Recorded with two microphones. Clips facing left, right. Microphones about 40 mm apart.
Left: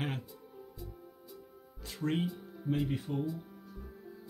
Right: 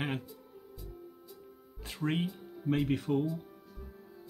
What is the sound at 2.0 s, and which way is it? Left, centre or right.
Speech, centre.